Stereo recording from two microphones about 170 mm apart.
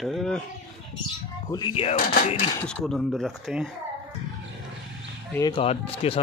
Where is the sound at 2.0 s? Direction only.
60° left (ahead or behind).